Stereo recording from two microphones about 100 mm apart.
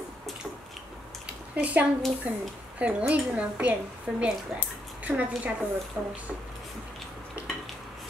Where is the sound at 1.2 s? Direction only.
15° right (ahead or behind).